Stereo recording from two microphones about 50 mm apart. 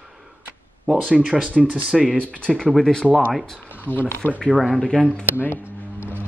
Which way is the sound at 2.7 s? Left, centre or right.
Centre.